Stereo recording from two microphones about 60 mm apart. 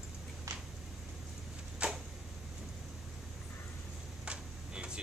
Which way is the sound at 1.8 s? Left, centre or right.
Centre.